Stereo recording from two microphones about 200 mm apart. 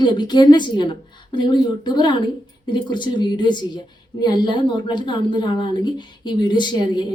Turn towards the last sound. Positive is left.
turn(degrees=20)  # may be behind; listen again after turning